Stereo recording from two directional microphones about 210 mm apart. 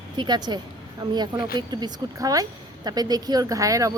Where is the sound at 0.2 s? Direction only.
20° right (ahead or behind).